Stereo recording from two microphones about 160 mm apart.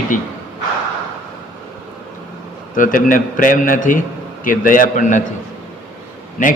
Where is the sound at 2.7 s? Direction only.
55° left (ahead or behind).